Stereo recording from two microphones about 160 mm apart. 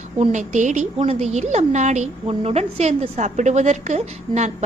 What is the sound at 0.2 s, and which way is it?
A woman's voice, 45° right (ahead or behind).